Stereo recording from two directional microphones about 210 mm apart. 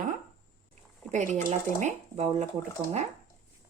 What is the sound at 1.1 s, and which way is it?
Speech, 35° right (ahead or behind).